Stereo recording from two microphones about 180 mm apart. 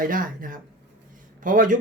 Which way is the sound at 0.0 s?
50° right (ahead or behind).